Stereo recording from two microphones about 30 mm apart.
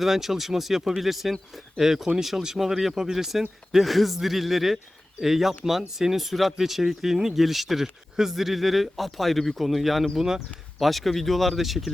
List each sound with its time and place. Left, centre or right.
0.0 s speech: centre
10.2 s speech: centre
10.8 s speech: centre